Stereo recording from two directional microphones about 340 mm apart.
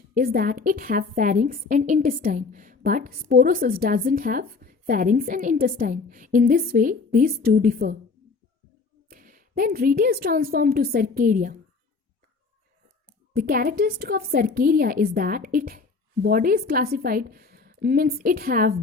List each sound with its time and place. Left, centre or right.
0.1 s a woman's voice: right
9.0 s a woman's voice: right
13.3 s a woman's voice: right